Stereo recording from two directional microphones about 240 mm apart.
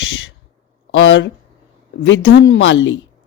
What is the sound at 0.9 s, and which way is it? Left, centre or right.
A woman's voice, left.